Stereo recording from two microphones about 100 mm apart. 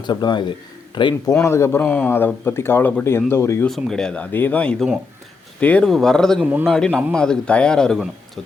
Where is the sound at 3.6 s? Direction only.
5° left (ahead or behind).